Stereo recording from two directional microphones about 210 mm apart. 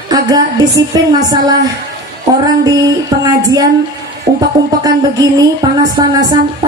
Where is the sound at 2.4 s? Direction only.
15° right (ahead or behind).